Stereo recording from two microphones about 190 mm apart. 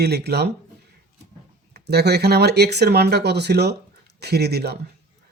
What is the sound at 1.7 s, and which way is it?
Speech, 60° right (ahead or behind).